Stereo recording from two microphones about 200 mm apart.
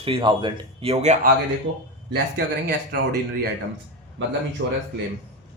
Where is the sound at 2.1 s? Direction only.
50° right (ahead or behind).